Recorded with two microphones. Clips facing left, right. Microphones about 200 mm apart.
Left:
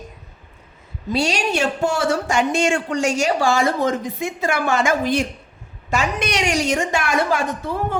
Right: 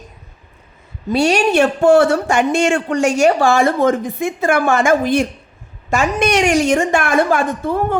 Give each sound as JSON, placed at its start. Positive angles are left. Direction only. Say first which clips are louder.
{"t": 1.1, "sound": "a woman's voice", "louder": "right 7 dB", "side_deg": -55}